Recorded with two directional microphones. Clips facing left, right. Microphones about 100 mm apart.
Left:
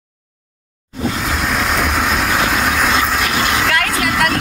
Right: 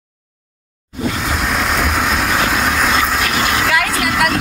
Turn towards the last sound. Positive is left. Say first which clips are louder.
# even
turn(degrees=0)  # may be behind; listen again after turning